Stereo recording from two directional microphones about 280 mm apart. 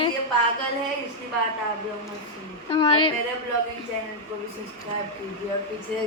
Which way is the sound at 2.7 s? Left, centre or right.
Centre.